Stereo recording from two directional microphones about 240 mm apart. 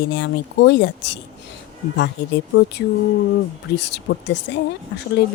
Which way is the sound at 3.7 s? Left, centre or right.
Left.